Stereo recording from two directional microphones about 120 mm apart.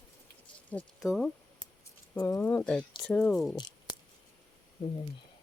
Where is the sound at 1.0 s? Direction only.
Centre (ahead or behind).